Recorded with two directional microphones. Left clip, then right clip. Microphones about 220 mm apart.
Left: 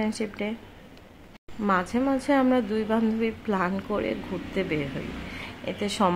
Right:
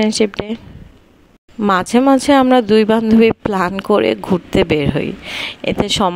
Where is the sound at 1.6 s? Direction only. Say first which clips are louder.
Right 11 dB; 45° right (ahead or behind).